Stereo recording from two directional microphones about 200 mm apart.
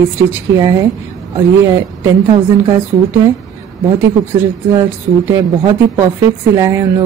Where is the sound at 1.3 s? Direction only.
20° right (ahead or behind).